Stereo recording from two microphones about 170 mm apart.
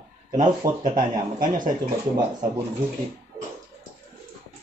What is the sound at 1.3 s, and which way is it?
Speech, 55° right (ahead or behind).